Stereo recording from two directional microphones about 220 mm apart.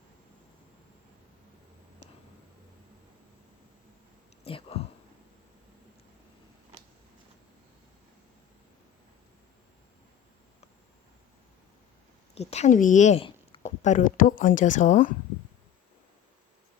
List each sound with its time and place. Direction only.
4.4 s whispering: 25° left (ahead or behind)
12.3 s speech: 30° left (ahead or behind)